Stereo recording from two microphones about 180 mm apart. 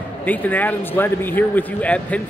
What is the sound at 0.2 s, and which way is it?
Speech, 10° left (ahead or behind).